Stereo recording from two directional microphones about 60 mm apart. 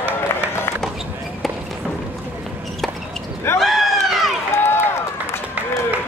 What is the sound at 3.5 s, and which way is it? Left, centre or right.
Run, centre.